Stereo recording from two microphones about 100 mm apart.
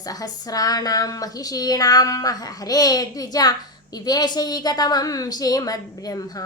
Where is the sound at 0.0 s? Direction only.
40° left (ahead or behind).